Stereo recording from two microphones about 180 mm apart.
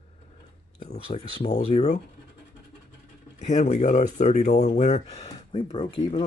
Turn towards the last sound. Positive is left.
turn(degrees=30)  # may be behind; listen again after turning